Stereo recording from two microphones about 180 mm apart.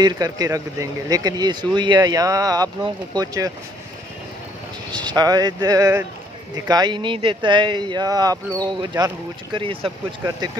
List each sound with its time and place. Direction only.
0.0 s speech: 20° right (ahead or behind)
4.9 s speech: 25° right (ahead or behind)